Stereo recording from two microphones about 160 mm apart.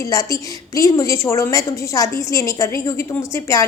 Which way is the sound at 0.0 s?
20° left (ahead or behind).